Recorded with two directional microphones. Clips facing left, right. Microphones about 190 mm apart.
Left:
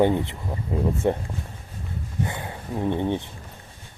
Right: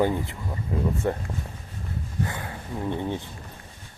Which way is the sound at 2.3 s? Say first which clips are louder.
Left 2 dB; 20° left (ahead or behind).